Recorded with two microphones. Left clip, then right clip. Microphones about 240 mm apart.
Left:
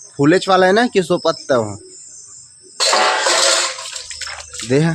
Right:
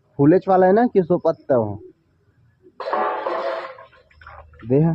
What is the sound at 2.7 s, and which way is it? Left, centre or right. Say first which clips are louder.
Music: left 8 dB; centre.